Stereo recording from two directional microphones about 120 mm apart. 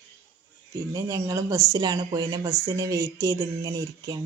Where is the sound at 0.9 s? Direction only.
30° right (ahead or behind).